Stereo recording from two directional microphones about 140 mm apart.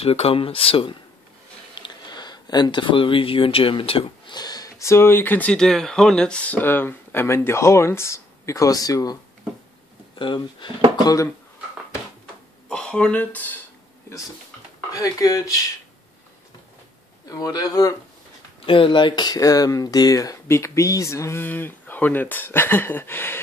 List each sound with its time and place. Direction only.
0.0 s speech: 45° left (ahead or behind)
1.8 s speech: 30° left (ahead or behind)
12.6 s speech: 5° left (ahead or behind)
14.9 s speech: 25° left (ahead or behind)
17.3 s speech: 25° left (ahead or behind)
18.7 s speech: 35° left (ahead or behind); by 23.4 s 15° left (ahead or behind)